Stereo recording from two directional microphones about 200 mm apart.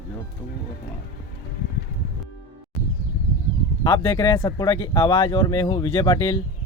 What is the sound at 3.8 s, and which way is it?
Speech, 15° left (ahead or behind).